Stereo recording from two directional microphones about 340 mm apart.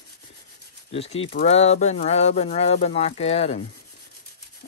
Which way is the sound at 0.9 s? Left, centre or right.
Centre.